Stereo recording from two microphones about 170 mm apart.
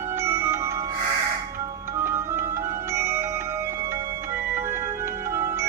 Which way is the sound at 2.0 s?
15° right (ahead or behind).